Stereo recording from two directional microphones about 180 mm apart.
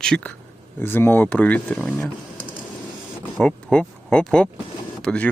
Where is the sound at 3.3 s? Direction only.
5° left (ahead or behind).